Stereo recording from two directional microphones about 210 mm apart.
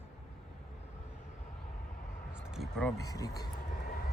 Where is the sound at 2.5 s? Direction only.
Centre (ahead or behind).